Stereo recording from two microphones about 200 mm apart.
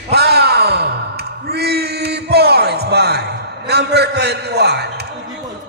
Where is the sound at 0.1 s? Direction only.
50° right (ahead or behind).